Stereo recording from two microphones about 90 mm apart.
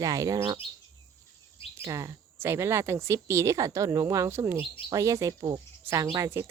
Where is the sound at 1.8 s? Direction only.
35° right (ahead or behind).